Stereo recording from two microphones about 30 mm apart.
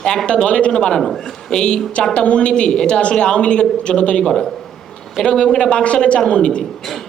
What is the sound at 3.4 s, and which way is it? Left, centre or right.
Speech, left.